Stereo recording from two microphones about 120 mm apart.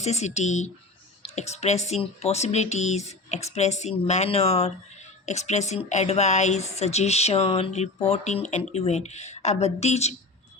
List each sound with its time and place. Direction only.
0.0 s speech: 65° left (ahead or behind)
5.2 s a woman's voice: 70° left (ahead or behind)